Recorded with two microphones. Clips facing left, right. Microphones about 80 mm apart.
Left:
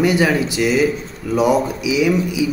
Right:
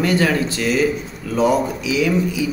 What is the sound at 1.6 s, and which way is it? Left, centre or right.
Speech, centre.